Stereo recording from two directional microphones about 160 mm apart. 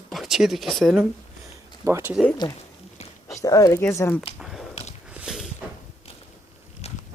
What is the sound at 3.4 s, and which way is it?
Speech, 20° left (ahead or behind).